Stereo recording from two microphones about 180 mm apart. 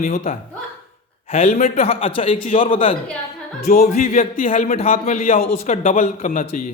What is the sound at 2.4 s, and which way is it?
Speech, 50° left (ahead or behind).